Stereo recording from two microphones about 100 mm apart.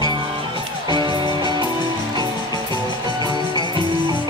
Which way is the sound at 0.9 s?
50° right (ahead or behind).